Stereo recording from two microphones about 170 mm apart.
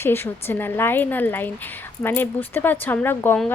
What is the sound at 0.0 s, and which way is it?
A woman's voice, 15° left (ahead or behind).